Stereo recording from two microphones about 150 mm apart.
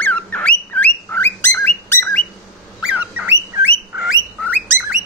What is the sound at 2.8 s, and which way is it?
Bird, 10° right (ahead or behind).